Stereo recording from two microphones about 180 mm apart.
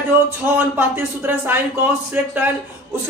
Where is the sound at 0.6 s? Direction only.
10° right (ahead or behind).